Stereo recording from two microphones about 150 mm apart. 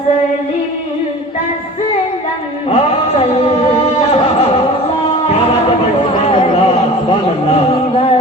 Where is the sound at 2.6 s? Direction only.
40° left (ahead or behind).